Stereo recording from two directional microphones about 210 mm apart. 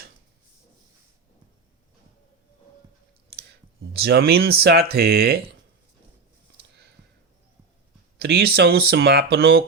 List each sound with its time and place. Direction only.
3.9 s speech: 50° right (ahead or behind)
8.2 s speech: 50° right (ahead or behind)